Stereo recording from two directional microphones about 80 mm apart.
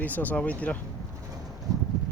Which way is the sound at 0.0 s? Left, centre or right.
Left.